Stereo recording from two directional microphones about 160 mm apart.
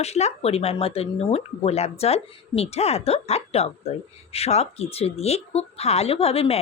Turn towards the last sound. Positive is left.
turn(degrees=40)  # may be behind; listen again after turning